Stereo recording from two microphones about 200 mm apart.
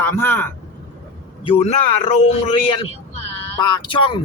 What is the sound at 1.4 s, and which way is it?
Speech, 30° left (ahead or behind).